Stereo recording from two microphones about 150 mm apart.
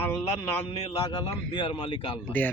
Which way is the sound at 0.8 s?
40° left (ahead or behind).